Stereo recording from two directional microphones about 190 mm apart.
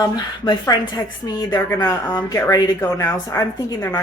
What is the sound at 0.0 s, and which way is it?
A woman's voice, 20° left (ahead or behind).